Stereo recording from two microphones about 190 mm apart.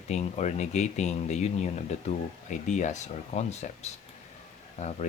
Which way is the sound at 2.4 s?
40° left (ahead or behind).